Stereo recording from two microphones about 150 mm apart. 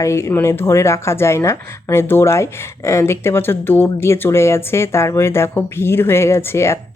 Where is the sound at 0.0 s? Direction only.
20° left (ahead or behind).